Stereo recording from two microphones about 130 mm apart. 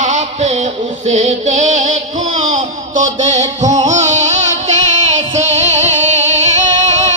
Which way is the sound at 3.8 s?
65° right (ahead or behind).